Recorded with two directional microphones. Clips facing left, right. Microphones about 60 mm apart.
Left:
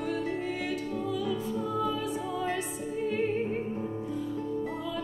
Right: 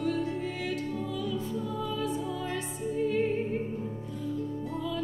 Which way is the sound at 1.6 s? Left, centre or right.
Left.